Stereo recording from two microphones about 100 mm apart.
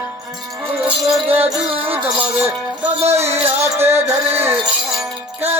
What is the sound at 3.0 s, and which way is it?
Music, 90° right.